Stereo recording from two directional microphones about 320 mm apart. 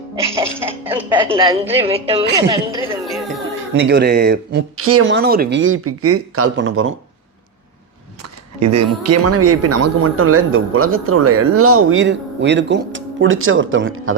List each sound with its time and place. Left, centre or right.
0.6 s speech: centre
3.7 s speech: right
4.8 s speech: right
8.2 s speech: right